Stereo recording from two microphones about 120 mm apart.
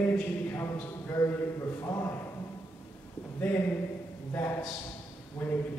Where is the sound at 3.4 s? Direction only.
20° left (ahead or behind).